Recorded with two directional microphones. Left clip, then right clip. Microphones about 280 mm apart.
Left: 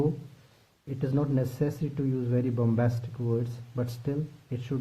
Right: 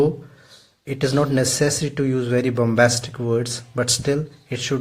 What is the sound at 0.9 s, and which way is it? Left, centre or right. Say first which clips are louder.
Speech: right 11 dB; centre.